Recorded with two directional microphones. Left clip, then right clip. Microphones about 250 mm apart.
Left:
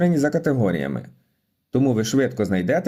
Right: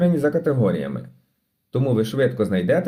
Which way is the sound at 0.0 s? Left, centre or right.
Left.